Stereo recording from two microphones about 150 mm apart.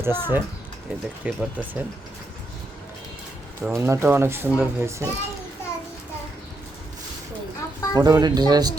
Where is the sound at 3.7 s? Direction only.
20° right (ahead or behind).